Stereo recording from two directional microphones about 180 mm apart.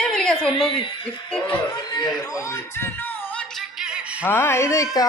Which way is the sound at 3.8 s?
5° right (ahead or behind).